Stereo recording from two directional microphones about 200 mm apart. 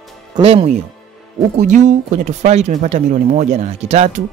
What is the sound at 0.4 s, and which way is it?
Speech, 30° right (ahead or behind).